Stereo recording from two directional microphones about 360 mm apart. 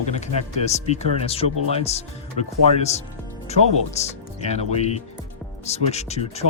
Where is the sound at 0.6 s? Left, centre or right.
Centre.